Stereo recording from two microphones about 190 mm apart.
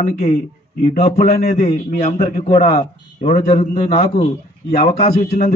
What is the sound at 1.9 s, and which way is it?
Speech, 50° left (ahead or behind).